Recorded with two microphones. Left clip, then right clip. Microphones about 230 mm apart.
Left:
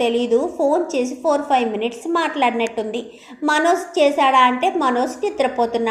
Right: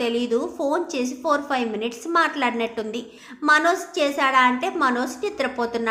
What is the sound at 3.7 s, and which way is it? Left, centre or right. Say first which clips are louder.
Speech: left 5 dB; right.